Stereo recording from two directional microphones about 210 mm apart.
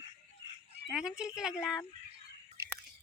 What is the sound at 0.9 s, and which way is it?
Speech, 5° right (ahead or behind).